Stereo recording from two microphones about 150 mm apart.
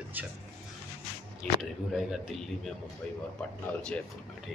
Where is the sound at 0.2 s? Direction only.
10° right (ahead or behind).